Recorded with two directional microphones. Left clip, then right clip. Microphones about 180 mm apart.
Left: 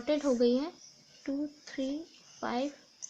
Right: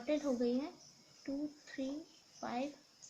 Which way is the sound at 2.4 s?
55° left (ahead or behind).